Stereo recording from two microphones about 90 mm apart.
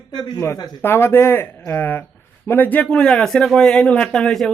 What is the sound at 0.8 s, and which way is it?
A man's voice, 25° left (ahead or behind).